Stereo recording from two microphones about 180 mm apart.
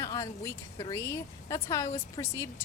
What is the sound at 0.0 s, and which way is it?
A woman's voice, 15° left (ahead or behind).